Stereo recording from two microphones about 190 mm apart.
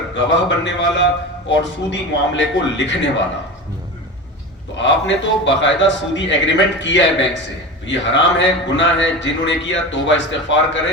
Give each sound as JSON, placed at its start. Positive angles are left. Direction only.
{"t": 0.1, "sound": "a man's voice", "side_deg": 70}
{"t": 4.8, "sound": "a man's voice", "side_deg": 70}